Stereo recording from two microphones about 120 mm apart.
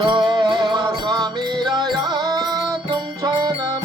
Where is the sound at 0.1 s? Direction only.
40° right (ahead or behind).